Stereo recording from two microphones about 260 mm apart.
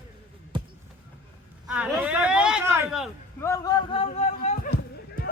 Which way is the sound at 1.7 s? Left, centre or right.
Centre.